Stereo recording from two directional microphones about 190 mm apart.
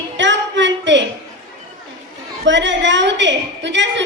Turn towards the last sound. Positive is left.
turn(degrees=-70)  # may be behind; listen again after turning